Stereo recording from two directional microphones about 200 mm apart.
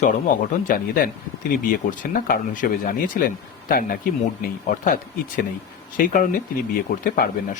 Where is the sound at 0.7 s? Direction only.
45° left (ahead or behind).